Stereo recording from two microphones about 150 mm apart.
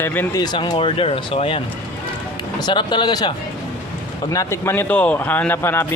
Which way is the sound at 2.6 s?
30° left (ahead or behind).